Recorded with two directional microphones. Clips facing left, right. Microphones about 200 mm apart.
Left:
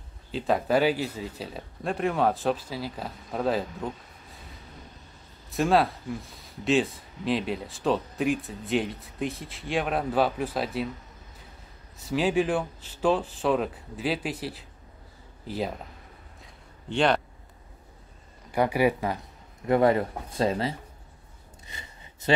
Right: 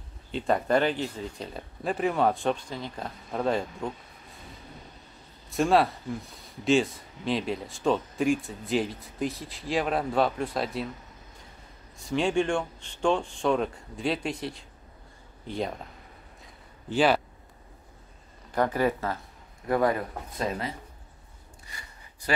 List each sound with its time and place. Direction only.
0.3 s speech: centre (ahead or behind)
5.5 s speech: centre (ahead or behind)
12.0 s speech: 5° left (ahead or behind)
16.4 s a sound: 5° right (ahead or behind)
18.5 s speech: 10° left (ahead or behind)
19.7 s speech: 25° left (ahead or behind)
21.6 s a sound: 20° left (ahead or behind)